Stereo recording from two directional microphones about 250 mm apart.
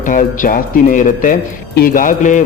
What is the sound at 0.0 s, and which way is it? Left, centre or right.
Speech, left.